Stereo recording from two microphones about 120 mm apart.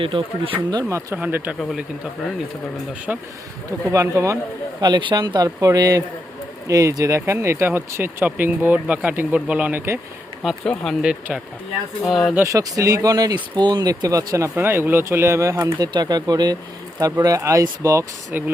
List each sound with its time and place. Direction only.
0.0 s speech: 45° right (ahead or behind)
0.7 s speech: 30° right (ahead or behind)
1.2 s speech: 10° right (ahead or behind)
3.1 s speech: 10° right (ahead or behind)
3.9 s speech: 25° right (ahead or behind)
4.8 s a man's voice: 40° right (ahead or behind); by 10.0 s 20° right (ahead or behind)
10.4 s speech: 5° left (ahead or behind)
11.0 s speech: 10° right (ahead or behind)
12.5 s speech: 30° right (ahead or behind)
15.8 s a man's voice: 35° right (ahead or behind)